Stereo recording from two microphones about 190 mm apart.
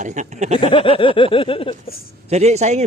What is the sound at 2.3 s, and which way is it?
Speech, 35° right (ahead or behind).